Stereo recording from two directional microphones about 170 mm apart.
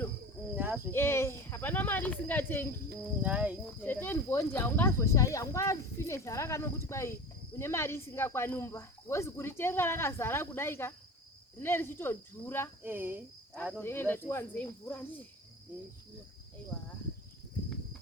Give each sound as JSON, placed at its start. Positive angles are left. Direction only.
{"t": 0.5, "sound": "cricket", "side_deg": -10}
{"t": 0.9, "sound": "speech", "side_deg": 15}
{"t": 3.2, "sound": "speech", "side_deg": -10}
{"t": 3.8, "sound": "speech", "side_deg": 10}
{"t": 12.8, "sound": "speech", "side_deg": -10}
{"t": 13.7, "sound": "speech", "side_deg": 15}